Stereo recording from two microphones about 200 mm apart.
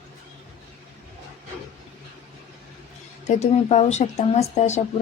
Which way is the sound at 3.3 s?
35° left (ahead or behind).